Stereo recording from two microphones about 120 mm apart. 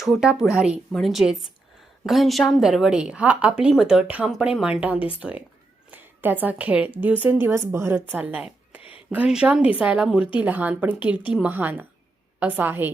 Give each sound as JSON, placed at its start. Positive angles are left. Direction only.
{"t": 0.0, "sound": "a woman's voice", "side_deg": -5}
{"t": 8.8, "sound": "a sound", "side_deg": 50}
{"t": 9.0, "sound": "a woman's voice", "side_deg": -5}